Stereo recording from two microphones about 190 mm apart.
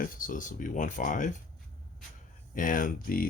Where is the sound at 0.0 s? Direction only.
45° left (ahead or behind).